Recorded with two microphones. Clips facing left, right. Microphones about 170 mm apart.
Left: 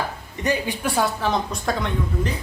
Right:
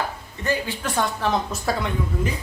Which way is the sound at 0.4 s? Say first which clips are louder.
Left 2 dB; 15° left (ahead or behind).